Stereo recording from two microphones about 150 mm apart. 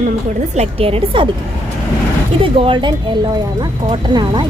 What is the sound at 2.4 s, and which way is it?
Speech, 35° right (ahead or behind).